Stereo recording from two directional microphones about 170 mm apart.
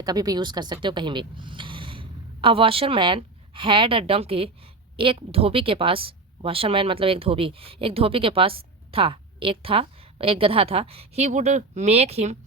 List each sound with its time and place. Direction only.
0.0 s a woman's voice: 20° right (ahead or behind); by 12.4 s 40° right (ahead or behind)